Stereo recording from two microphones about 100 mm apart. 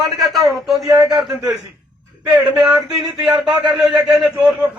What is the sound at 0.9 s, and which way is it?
Speech, 45° right (ahead or behind).